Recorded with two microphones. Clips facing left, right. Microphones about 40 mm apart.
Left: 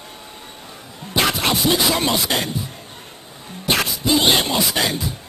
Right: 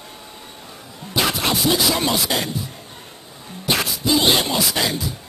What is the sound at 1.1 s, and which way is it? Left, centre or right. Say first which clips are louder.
Music: left 1 dB; centre.